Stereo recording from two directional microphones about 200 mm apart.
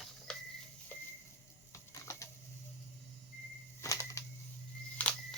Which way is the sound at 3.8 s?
15° left (ahead or behind).